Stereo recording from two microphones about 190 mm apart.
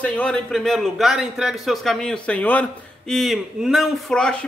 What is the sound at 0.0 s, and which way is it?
A man's voice, 5° left (ahead or behind).